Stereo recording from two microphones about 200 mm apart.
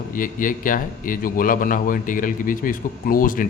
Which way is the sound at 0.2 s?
40° left (ahead or behind).